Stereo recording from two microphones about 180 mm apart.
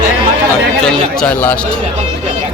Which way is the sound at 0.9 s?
5° left (ahead or behind).